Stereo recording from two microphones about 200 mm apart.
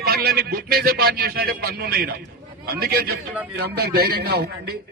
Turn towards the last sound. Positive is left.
turn(degrees=-55)  # may be behind; listen again after turning